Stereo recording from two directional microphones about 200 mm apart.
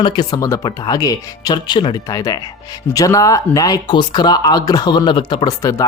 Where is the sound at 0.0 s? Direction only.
20° left (ahead or behind).